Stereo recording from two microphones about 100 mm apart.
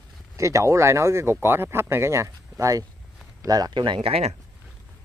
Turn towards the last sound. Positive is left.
turn(degrees=-85)